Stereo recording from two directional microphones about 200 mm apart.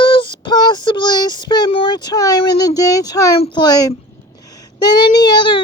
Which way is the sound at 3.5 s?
20° left (ahead or behind).